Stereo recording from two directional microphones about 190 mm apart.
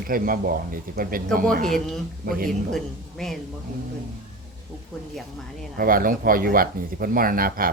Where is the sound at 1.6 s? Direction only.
Centre (ahead or behind).